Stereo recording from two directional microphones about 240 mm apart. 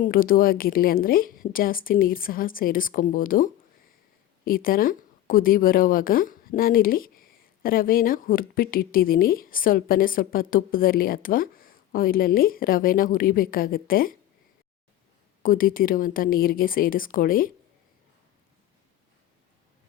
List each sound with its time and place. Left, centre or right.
0.0 s a woman's voice: left
15.4 s a woman's voice: left